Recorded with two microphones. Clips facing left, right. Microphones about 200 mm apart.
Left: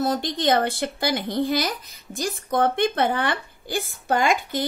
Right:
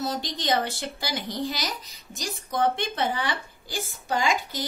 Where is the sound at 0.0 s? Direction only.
55° left (ahead or behind).